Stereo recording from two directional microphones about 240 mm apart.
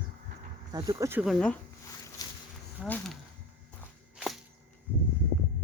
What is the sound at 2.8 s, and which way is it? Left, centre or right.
Speech, centre.